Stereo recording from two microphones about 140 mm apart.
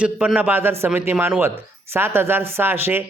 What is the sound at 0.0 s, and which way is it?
Speech, 10° right (ahead or behind).